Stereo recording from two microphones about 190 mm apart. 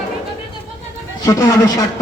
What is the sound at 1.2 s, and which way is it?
Speech, 15° left (ahead or behind).